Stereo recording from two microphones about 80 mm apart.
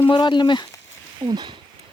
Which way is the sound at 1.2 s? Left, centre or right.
Right.